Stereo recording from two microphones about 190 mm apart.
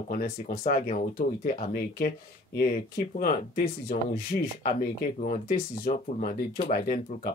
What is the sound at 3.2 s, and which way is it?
Speech, 50° left (ahead or behind).